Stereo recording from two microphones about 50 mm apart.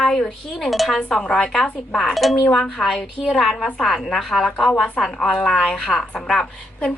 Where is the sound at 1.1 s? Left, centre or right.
Centre.